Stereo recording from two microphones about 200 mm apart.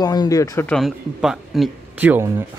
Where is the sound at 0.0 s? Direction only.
20° left (ahead or behind).